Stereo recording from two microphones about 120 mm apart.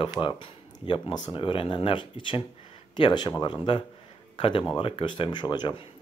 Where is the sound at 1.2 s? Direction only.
45° left (ahead or behind).